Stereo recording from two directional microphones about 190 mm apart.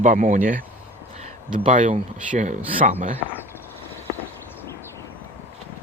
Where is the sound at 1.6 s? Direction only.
40° right (ahead or behind).